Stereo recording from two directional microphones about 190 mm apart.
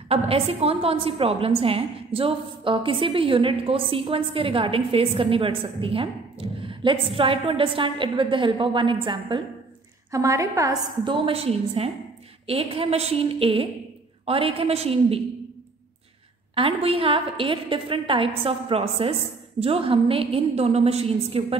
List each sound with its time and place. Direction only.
0.1 s a woman's voice: 30° right (ahead or behind)
16.5 s a woman's voice: 30° right (ahead or behind)